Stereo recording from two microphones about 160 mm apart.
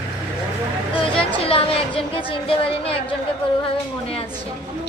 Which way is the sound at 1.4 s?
35° left (ahead or behind).